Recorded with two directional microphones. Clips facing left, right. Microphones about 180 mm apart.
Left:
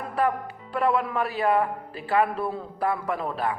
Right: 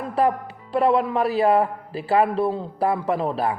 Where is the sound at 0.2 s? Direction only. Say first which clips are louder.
Right 4 dB; 30° right (ahead or behind).